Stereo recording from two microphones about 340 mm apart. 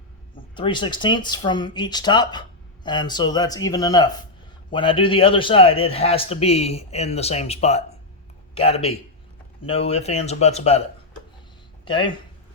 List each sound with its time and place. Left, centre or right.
0.5 s speech: centre
11.9 s speech: centre